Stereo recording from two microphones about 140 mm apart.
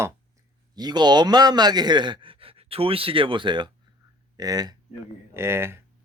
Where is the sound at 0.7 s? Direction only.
30° right (ahead or behind).